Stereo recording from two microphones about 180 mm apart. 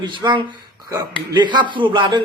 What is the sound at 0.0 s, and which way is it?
A man's voice, 25° right (ahead or behind).